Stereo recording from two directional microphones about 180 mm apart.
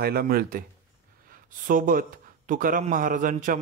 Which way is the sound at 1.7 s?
50° right (ahead or behind).